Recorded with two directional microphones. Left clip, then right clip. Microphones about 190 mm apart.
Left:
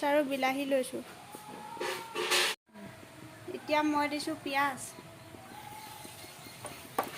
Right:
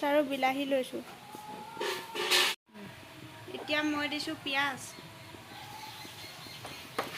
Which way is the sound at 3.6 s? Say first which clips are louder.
Left 2 dB; 65° left (ahead or behind).